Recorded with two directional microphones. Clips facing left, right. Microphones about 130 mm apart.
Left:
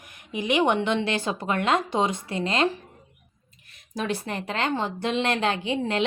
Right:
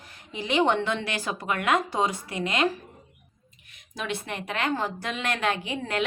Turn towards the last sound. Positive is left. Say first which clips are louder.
# left 4 dB
turn(degrees=25)  # may be behind; listen again after turning